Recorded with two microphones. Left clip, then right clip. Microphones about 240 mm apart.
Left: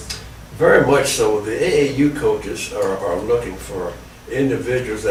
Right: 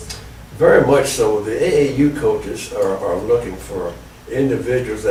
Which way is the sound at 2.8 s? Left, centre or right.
Centre.